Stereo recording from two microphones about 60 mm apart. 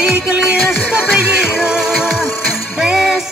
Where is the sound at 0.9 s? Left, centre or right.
Centre.